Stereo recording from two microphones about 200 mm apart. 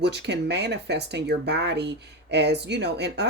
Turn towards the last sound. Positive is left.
turn(degrees=-60)  # may be behind; listen again after turning